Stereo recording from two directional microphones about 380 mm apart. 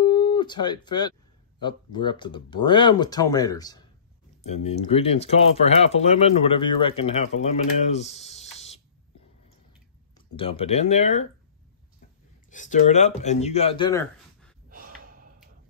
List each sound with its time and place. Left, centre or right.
0.0 s a sound: centre
1.6 s speech: centre
10.1 s speech: centre
12.4 s speech: centre
14.7 s gasp: right